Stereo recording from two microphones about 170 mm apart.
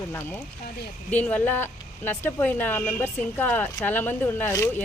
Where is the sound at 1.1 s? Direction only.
10° left (ahead or behind).